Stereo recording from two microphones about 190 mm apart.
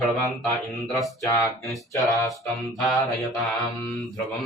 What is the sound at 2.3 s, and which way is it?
Mantra, centre (ahead or behind).